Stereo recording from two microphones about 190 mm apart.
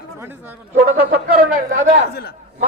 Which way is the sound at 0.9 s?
50° right (ahead or behind).